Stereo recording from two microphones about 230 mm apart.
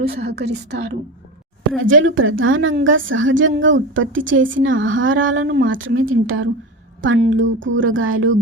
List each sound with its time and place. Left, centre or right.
0.0 s a woman's voice: right
1.8 s a woman's voice: right